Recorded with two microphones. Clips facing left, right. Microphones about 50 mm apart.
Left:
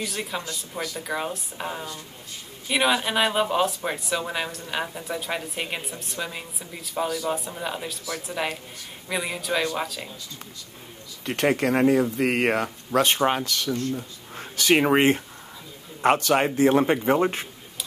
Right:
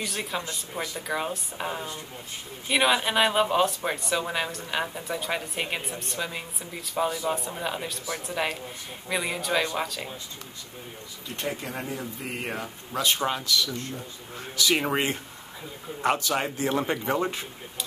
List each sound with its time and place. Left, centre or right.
0.0 s speech: centre
0.4 s speech: centre
0.9 s speech: centre
11.2 s speech: left
13.0 s speech: left
14.3 s a sound: left
14.8 s speech: left
16.3 s speech: left